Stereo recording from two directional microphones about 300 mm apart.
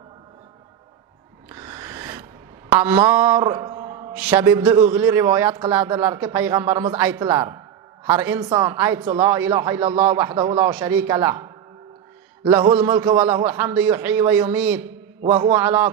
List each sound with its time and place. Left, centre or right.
1.5 s a sound: centre
4.1 s a woman's voice: centre
15.2 s a man's voice: centre
15.5 s a woman's voice: centre